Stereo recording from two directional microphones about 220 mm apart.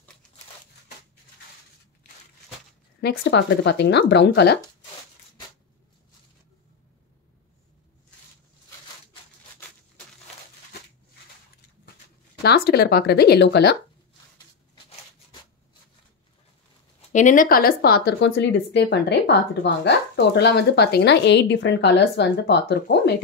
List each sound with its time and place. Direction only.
3.0 s speech: 50° left (ahead or behind)
12.4 s speech: 45° left (ahead or behind)
17.1 s speech: 35° left (ahead or behind)